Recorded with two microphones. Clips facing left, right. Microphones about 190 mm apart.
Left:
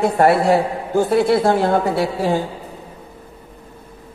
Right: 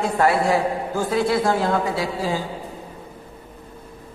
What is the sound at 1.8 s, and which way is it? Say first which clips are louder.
Speech: left 5 dB; 60° left (ahead or behind).